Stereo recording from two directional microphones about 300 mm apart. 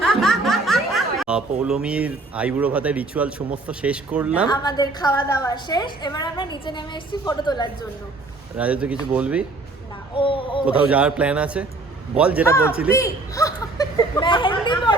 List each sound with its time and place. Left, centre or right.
0.0 s speech: centre
4.5 s a woman's voice: centre
8.5 s speech: centre
10.2 s a woman's voice: centre
10.7 s speech: centre
12.5 s a woman's voice: centre